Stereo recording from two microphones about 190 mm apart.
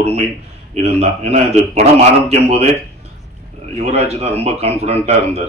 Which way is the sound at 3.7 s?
35° right (ahead or behind).